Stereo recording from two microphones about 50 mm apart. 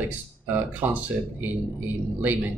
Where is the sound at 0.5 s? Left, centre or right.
Right.